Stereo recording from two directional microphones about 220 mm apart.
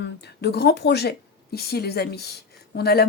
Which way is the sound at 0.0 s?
50° left (ahead or behind).